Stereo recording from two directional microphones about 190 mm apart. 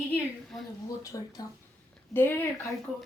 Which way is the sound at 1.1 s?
20° left (ahead or behind).